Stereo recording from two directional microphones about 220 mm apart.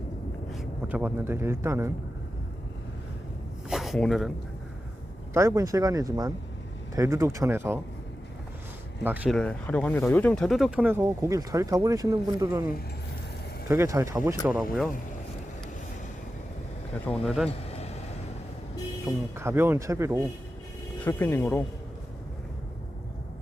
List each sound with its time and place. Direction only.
0.5 s speech: 5° right (ahead or behind)
3.7 s zipper: centre (ahead or behind)
5.3 s speech: 15° right (ahead or behind)
9.0 s speech: 5° right (ahead or behind)
9.3 s speech: 5° left (ahead or behind)
17.1 s speech: centre (ahead or behind)
17.7 s vehicle: 30° left (ahead or behind)
19.0 s speech: 10° right (ahead or behind)
21.0 s speech: 10° left (ahead or behind)